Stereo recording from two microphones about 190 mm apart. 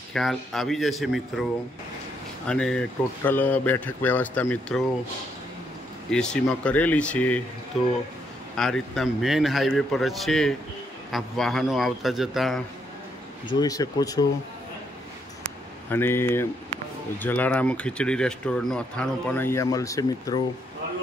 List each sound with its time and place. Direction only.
0.1 s a man's voice: centre (ahead or behind)
2.4 s speech: 5° left (ahead or behind)
6.0 s speech: 5° left (ahead or behind)
8.5 s a man's voice: 5° left (ahead or behind)
13.6 s speech: 20° left (ahead or behind)
15.9 s speech: 10° left (ahead or behind)